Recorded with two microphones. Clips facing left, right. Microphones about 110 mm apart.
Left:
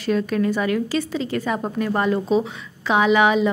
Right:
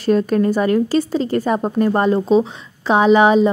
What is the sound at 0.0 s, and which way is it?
Speech, 40° right (ahead or behind).